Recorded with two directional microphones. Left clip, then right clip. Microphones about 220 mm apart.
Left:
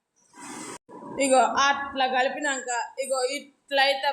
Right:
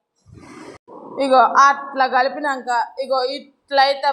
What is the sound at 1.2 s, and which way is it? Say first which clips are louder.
Speech: right 8 dB; 10° right (ahead or behind).